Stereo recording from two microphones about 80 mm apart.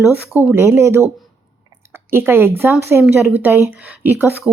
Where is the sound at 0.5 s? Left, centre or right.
Right.